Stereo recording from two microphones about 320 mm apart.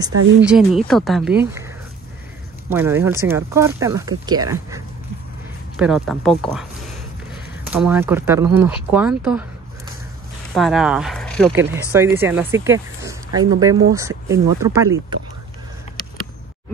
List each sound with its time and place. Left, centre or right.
0.1 s speech: right
0.5 s speech: centre
2.7 s speech: centre
7.7 s speech: centre
10.5 s speech: centre